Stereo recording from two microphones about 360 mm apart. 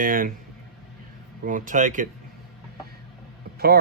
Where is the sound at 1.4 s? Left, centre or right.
Right.